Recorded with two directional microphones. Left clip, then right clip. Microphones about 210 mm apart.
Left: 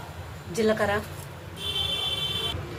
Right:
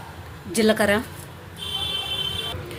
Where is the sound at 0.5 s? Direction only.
50° right (ahead or behind).